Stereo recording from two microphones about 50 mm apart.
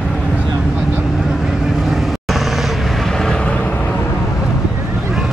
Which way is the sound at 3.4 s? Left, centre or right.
Left.